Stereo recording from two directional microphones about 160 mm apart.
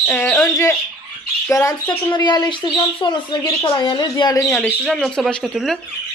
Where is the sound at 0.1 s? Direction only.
10° left (ahead or behind).